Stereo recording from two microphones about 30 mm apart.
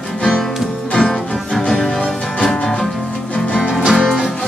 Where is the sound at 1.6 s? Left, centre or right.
Left.